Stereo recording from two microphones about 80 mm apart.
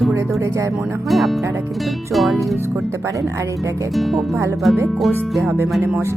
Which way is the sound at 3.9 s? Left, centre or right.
Centre.